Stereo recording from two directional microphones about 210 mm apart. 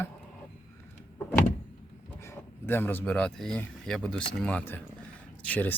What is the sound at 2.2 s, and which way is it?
Speech, 10° left (ahead or behind).